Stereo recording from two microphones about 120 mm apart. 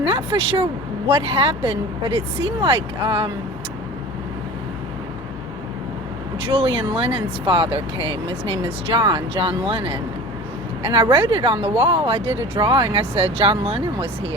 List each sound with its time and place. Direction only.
0.0 s speech: 50° right (ahead or behind)
6.4 s speech: 45° right (ahead or behind)